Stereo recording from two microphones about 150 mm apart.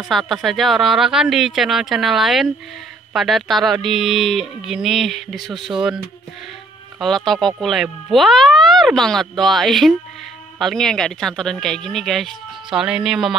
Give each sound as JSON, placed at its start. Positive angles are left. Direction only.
{"t": 0.1, "sound": "speech", "side_deg": 0}
{"t": 7.0, "sound": "speech", "side_deg": 0}